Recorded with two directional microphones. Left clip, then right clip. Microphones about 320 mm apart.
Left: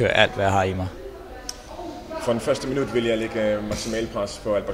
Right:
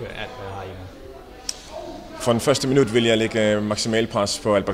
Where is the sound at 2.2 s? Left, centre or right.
Right.